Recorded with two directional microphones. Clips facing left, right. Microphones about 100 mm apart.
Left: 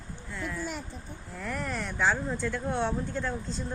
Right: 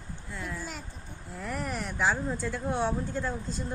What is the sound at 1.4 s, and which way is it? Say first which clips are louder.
Speech: even; 10° right (ahead or behind).